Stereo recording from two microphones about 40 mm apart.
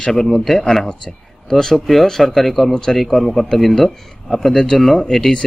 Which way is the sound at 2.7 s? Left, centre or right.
Centre.